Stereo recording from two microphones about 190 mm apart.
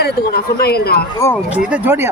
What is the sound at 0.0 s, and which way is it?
Speech, 55° left (ahead or behind).